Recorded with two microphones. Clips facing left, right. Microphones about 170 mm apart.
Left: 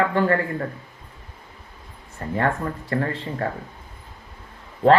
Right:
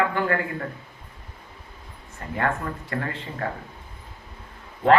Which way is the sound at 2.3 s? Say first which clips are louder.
Left 3 dB; 35° left (ahead or behind).